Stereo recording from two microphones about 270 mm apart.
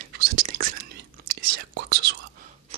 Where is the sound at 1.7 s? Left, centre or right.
Right.